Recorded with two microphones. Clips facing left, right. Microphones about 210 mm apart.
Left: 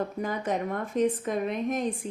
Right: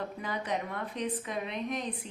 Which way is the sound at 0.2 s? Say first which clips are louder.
Left 4 dB; 45° left (ahead or behind).